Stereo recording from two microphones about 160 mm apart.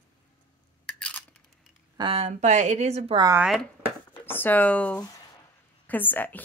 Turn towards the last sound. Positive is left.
turn(degrees=10)  # may be behind; listen again after turning